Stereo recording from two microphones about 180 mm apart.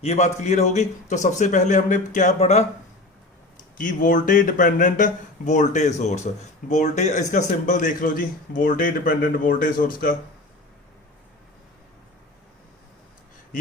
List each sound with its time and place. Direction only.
0.0 s a man's voice: 40° left (ahead or behind)
3.8 s a man's voice: 45° left (ahead or behind)